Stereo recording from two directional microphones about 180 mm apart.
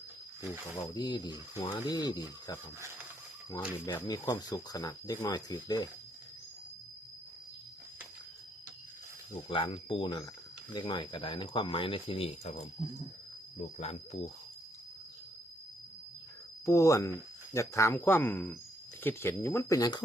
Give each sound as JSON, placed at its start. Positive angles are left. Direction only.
{"t": 0.8, "sound": "speech", "side_deg": 20}
{"t": 3.8, "sound": "speech", "side_deg": 20}
{"t": 9.5, "sound": "speech", "side_deg": 30}
{"t": 13.7, "sound": "speech", "side_deg": 40}
{"t": 16.6, "sound": "speech", "side_deg": 15}